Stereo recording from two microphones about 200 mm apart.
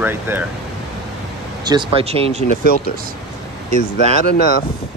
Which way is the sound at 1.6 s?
20° right (ahead or behind).